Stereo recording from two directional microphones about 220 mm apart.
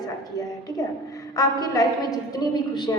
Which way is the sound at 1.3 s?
15° left (ahead or behind).